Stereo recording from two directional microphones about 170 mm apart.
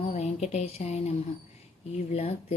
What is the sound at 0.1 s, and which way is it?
Speech, 40° left (ahead or behind).